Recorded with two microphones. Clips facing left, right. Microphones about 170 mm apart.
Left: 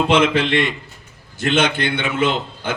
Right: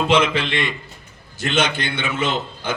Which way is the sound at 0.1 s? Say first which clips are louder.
Left 2 dB; 60° left (ahead or behind).